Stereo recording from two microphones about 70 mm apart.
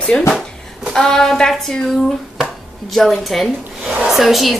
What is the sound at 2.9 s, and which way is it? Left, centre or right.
Speech, centre.